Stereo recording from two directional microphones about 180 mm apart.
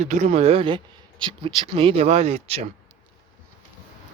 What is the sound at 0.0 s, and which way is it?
Speech, 40° right (ahead or behind).